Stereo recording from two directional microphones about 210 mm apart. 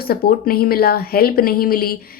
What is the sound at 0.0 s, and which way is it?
A woman's voice, 45° left (ahead or behind).